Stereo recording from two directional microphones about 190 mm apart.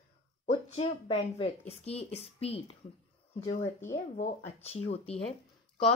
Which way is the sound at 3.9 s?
40° left (ahead or behind).